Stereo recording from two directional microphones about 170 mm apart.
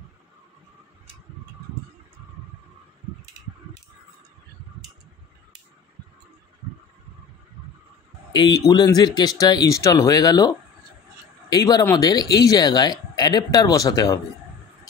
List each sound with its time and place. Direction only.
8.3 s speech: 25° left (ahead or behind)
11.5 s speech: 20° left (ahead or behind)